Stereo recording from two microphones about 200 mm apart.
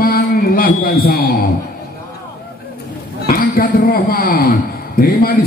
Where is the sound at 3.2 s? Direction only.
45° left (ahead or behind).